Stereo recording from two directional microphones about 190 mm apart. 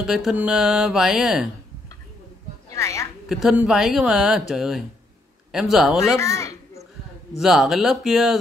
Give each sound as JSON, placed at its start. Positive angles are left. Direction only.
{"t": 0.0, "sound": "speech", "side_deg": 0}
{"t": 2.7, "sound": "a sound", "side_deg": 15}
{"t": 3.3, "sound": "speech", "side_deg": -5}
{"t": 6.1, "sound": "speech", "side_deg": 15}
{"t": 7.3, "sound": "speech", "side_deg": 0}